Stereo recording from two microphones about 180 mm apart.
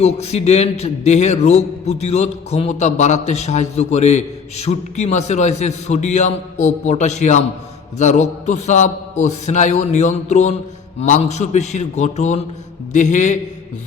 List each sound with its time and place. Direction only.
0.0 s a man's voice: 35° left (ahead or behind)